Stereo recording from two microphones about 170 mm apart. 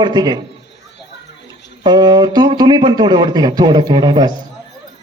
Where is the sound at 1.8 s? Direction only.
25° right (ahead or behind).